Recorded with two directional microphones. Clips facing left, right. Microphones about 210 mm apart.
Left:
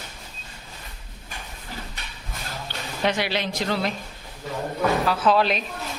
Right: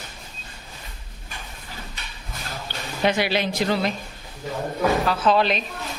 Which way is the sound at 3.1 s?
5° right (ahead or behind).